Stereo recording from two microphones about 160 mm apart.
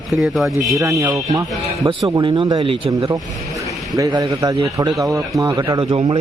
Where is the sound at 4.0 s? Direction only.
25° right (ahead or behind).